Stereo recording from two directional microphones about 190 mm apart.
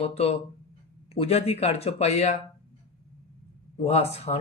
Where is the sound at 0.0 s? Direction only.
30° left (ahead or behind).